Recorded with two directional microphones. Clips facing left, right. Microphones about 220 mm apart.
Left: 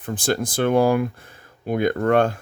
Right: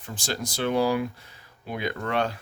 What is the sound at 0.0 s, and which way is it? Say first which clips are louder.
Speech: left 9 dB; 55° left (ahead or behind).